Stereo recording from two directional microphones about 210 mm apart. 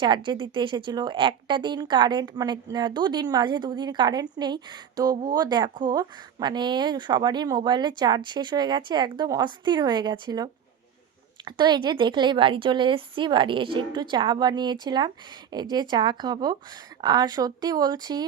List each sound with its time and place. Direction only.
0.0 s a woman's voice: 20° right (ahead or behind)